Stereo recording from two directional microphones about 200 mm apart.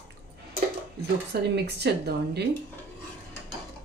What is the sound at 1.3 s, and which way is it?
Speech, 55° right (ahead or behind).